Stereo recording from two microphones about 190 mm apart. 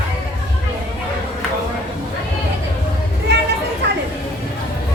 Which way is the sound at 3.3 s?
60° right (ahead or behind).